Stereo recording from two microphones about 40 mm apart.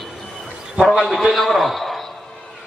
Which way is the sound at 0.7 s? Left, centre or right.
Centre.